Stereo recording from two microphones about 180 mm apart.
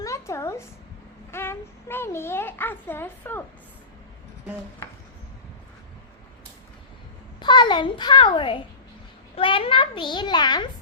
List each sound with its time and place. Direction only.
0.0 s a sound: 15° left (ahead or behind)
1.3 s a child's voice: 15° left (ahead or behind)
7.3 s a child's voice: 25° left (ahead or behind)